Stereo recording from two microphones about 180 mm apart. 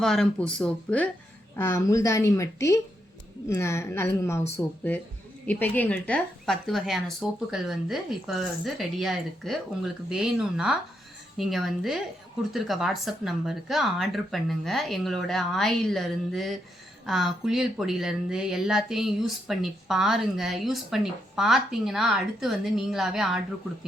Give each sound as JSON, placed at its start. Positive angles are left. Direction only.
{"t": 0.0, "sound": "a woman's voice", "side_deg": 0}